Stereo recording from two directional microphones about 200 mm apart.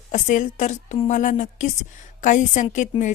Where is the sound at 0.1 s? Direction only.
40° left (ahead or behind).